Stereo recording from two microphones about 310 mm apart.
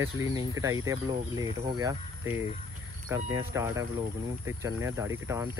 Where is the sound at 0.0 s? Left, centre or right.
Centre.